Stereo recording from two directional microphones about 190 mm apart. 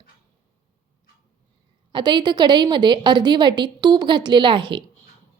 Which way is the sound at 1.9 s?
25° right (ahead or behind).